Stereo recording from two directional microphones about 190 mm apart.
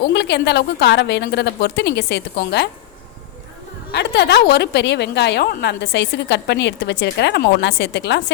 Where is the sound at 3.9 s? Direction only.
60° left (ahead or behind).